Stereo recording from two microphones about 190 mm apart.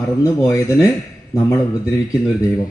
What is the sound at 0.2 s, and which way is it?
Speech, 15° left (ahead or behind).